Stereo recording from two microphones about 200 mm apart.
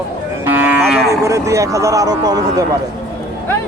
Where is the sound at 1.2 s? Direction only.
15° right (ahead or behind).